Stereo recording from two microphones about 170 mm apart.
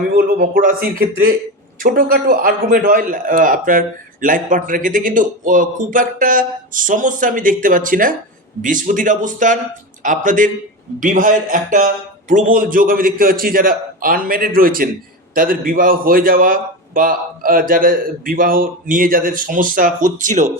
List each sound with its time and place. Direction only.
0.2 s a man's voice: 60° right (ahead or behind)